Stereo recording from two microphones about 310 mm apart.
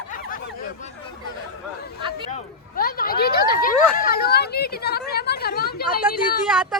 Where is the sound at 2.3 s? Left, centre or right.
Left.